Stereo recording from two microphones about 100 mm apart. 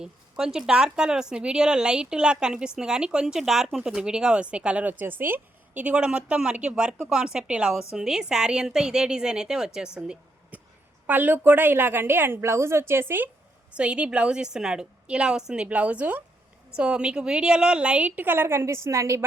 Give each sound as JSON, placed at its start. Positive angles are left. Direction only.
{"t": 0.0, "sound": "speech", "side_deg": -5}
{"t": 11.0, "sound": "a woman's voice", "side_deg": -20}
{"t": 13.7, "sound": "speech", "side_deg": -10}